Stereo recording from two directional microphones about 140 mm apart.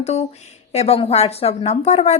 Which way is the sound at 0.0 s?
50° left (ahead or behind).